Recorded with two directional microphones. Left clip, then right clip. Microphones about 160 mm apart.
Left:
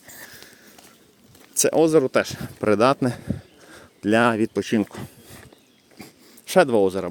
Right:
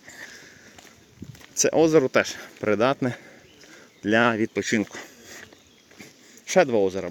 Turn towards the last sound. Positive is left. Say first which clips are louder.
# left 3 dB
turn(degrees=40)  # may be behind; listen again after turning